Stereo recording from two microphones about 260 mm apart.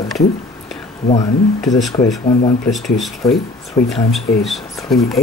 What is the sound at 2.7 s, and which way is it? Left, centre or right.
Speech, centre.